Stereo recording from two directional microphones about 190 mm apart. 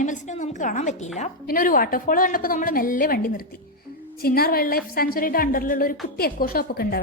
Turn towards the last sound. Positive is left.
turn(degrees=55)  # may be behind; listen again after turning